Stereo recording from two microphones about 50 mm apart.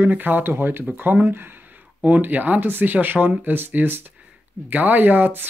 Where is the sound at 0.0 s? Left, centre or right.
Right.